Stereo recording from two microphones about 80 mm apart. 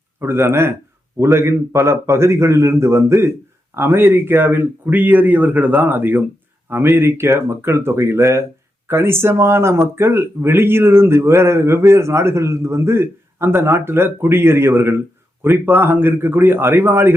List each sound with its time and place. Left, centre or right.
0.2 s speech: right